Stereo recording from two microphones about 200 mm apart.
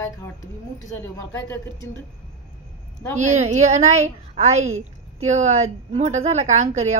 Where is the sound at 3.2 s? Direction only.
35° right (ahead or behind).